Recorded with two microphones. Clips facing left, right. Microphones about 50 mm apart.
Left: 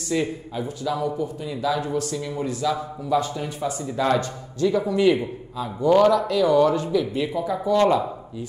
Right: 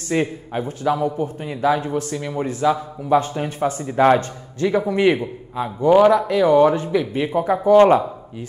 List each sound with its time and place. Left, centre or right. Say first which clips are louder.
0.1 s a man's voice: right 3 dB; right
5.9 s speech: right 4 dB; right
7.3 s speech: right 9 dB; right